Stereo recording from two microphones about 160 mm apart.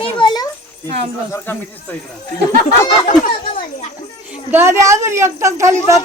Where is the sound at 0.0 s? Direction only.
30° left (ahead or behind).